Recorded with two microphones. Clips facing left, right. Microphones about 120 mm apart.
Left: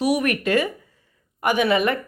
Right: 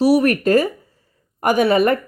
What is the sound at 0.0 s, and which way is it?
A woman's voice, 35° right (ahead or behind).